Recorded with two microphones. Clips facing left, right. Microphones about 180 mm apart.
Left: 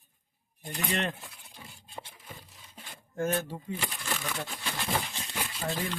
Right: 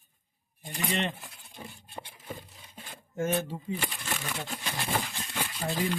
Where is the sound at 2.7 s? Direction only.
5° right (ahead or behind).